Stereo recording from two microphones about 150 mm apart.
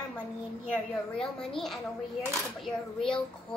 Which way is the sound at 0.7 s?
5° left (ahead or behind).